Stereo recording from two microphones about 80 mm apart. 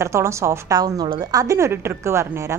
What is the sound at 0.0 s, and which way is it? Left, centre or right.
Speech, right.